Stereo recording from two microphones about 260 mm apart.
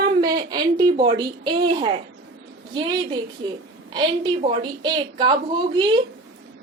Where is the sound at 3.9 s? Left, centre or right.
Centre.